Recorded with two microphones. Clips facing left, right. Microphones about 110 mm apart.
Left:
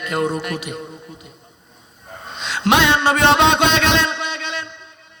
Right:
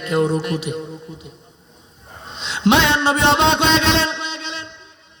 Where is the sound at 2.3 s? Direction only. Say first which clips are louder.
Right 1 dB; 55° left (ahead or behind).